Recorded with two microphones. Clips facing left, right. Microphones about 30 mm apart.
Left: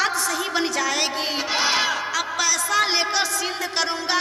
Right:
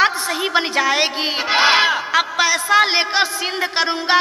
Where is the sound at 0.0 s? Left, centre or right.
Right.